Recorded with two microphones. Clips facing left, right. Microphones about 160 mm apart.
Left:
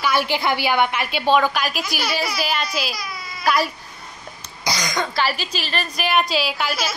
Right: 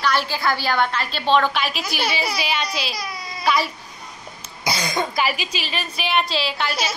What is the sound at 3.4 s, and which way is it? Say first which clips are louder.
Babbling: left 1 dB; 5° left (ahead or behind).